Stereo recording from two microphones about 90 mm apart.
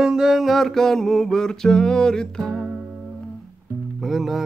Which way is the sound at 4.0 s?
Centre (ahead or behind).